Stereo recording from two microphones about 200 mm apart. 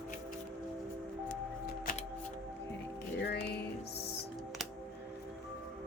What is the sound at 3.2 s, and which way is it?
Music, 55° left (ahead or behind).